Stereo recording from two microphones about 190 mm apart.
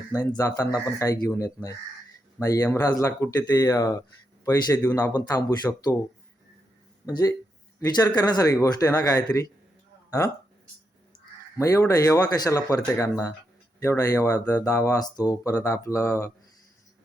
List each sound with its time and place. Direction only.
0.1 s speech: 15° left (ahead or behind)
7.0 s speech: 20° left (ahead or behind)
11.5 s speech: 15° left (ahead or behind)